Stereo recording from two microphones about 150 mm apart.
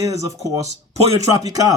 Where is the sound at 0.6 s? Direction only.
45° right (ahead or behind).